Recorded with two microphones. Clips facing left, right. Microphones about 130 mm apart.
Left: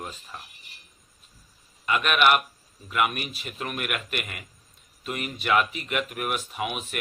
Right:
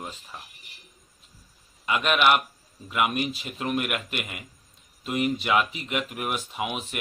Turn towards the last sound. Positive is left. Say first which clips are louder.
# even
turn(degrees=-20)  # may be behind; listen again after turning